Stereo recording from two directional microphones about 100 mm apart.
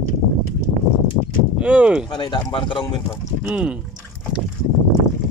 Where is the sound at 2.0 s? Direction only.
50° left (ahead or behind).